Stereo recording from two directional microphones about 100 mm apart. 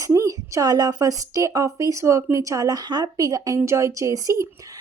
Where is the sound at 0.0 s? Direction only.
35° right (ahead or behind).